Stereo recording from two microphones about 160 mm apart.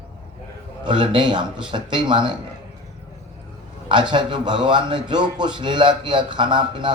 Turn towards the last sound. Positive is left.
turn(degrees=-30)  # may be behind; listen again after turning